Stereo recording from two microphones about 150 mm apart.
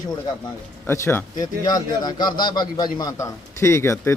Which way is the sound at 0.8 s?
15° left (ahead or behind).